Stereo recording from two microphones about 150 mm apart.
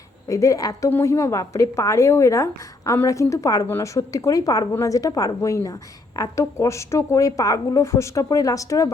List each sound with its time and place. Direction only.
0.3 s a woman's voice: 20° left (ahead or behind)